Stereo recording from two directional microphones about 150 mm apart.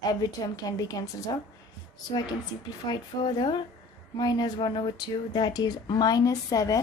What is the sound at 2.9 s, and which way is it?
Speech, 30° left (ahead or behind).